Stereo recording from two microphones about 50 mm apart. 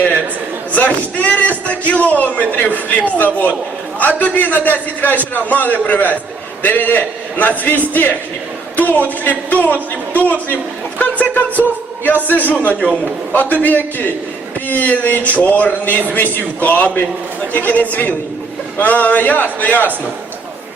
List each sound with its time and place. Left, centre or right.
0.7 s a man's voice: left